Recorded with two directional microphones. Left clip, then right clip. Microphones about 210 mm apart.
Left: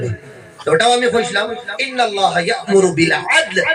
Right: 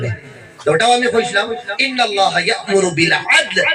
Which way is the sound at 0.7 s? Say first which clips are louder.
Even; 10° left (ahead or behind).